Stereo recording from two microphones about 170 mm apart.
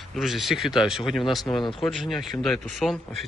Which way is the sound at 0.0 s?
Centre (ahead or behind).